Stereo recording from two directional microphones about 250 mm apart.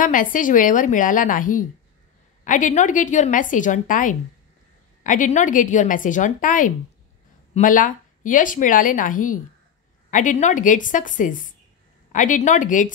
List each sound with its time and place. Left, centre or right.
0.0 s a woman's voice: left